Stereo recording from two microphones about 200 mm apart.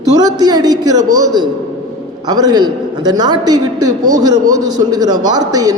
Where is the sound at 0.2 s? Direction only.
20° right (ahead or behind).